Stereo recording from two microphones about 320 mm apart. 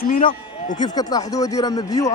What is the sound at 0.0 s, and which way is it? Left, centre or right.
Speech, left.